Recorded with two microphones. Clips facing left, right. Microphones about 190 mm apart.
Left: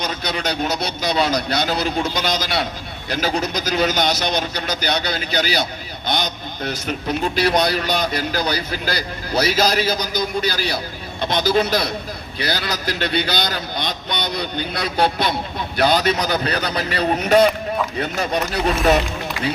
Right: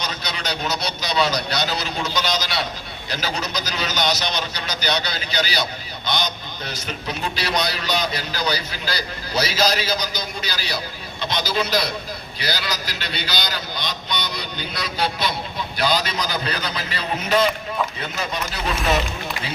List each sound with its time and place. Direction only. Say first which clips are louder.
0.0 s a man's voice: left 5 dB; 50° left (ahead or behind)